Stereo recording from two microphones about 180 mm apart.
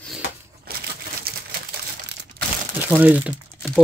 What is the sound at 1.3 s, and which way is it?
Typewriter, 55° right (ahead or behind).